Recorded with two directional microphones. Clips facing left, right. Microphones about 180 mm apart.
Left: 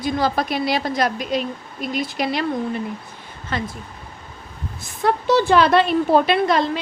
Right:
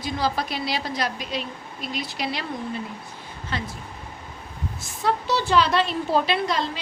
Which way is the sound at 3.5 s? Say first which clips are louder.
Left 5 dB; 50° left (ahead or behind).